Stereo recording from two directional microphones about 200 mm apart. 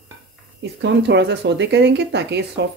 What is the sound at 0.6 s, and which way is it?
Speech, 60° right (ahead or behind).